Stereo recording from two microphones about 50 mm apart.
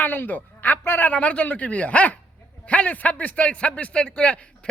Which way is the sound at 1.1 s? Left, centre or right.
Left.